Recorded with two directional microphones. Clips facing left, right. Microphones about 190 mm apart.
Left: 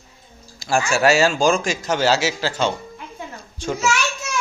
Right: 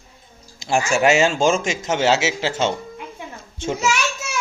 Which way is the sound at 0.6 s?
20° right (ahead or behind).